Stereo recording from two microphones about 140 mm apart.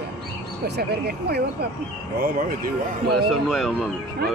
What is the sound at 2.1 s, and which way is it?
Speech, 90° right.